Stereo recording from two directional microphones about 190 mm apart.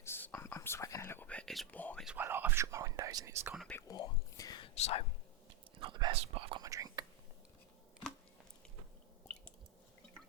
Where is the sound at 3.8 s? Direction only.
20° left (ahead or behind).